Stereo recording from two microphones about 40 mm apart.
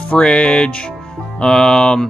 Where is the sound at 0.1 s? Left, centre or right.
Left.